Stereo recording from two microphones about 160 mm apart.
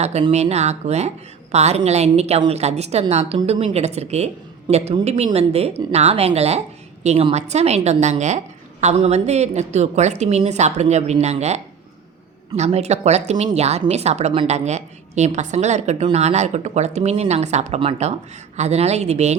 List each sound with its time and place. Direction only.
0.0 s a woman's voice: 40° right (ahead or behind)